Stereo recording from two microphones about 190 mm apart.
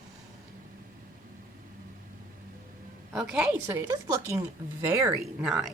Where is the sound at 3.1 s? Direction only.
5° right (ahead or behind).